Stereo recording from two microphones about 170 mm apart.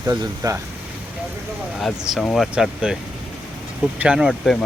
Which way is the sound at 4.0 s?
5° right (ahead or behind).